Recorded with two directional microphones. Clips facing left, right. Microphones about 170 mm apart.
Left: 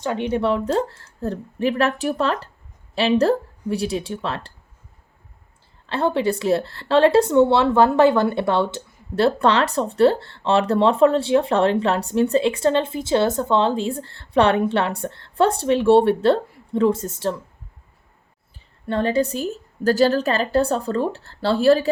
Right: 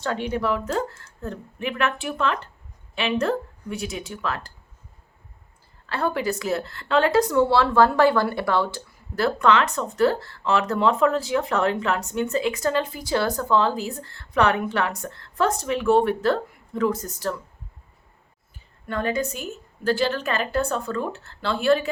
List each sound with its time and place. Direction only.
0.0 s a woman's voice: 20° left (ahead or behind)
5.8 s speech: 25° left (ahead or behind)
18.9 s a woman's voice: 30° left (ahead or behind)